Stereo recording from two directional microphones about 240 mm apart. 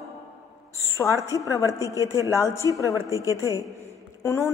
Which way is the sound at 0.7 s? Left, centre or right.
Centre.